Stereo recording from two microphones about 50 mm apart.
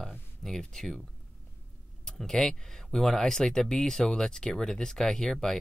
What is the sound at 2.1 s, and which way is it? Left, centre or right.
Speech, centre.